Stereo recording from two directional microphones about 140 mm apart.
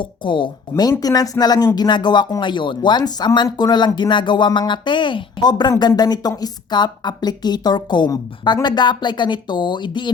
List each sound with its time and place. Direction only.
0.0 s speech: 35° left (ahead or behind)
0.8 s a woman's voice: 25° left (ahead or behind)